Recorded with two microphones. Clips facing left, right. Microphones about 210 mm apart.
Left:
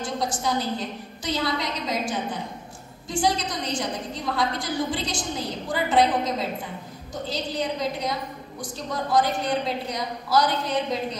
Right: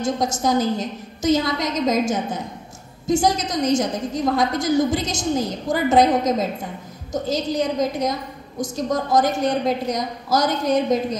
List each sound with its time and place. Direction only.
0.0 s a woman's voice: 45° right (ahead or behind)